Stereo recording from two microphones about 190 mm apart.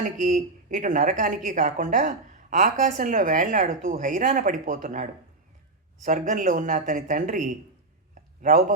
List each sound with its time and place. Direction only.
0.0 s a woman's voice: 40° right (ahead or behind)
6.1 s a woman's voice: 45° right (ahead or behind)